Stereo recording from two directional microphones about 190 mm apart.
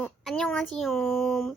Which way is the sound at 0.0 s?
5° left (ahead or behind).